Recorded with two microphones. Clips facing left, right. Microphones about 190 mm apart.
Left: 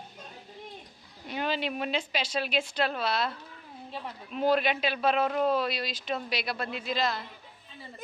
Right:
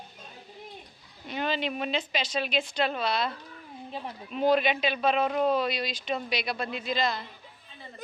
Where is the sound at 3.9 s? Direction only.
15° right (ahead or behind).